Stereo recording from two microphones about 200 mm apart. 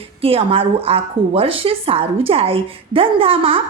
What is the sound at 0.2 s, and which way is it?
A woman's voice, 30° right (ahead or behind).